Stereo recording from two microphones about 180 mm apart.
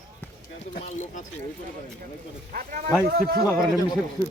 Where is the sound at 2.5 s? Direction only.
50° right (ahead or behind).